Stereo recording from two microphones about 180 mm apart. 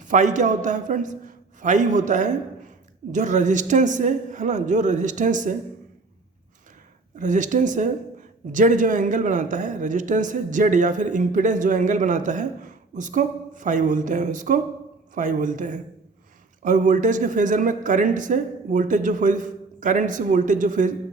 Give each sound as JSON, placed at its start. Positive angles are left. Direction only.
{"t": 0.0, "sound": "speech", "side_deg": -45}
{"t": 7.2, "sound": "speech", "side_deg": -45}